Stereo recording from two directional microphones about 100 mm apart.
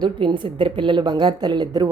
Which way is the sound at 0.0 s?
50° right (ahead or behind).